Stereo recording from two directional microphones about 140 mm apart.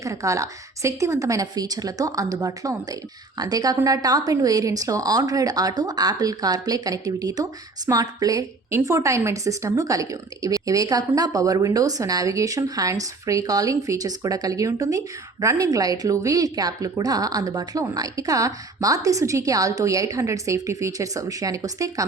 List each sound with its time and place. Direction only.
0.0 s a woman's voice: 20° right (ahead or behind)